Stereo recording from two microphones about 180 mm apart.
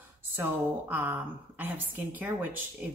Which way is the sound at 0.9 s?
10° right (ahead or behind).